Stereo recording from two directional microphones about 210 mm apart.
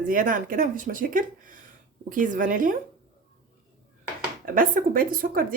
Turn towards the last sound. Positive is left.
turn(degrees=-45)  # may be behind; listen again after turning